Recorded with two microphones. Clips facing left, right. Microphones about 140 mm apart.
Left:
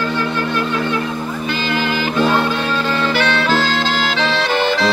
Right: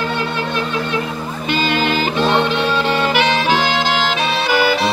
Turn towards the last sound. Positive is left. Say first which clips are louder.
# right 1 dB
turn(degrees=-5)  # may be behind; listen again after turning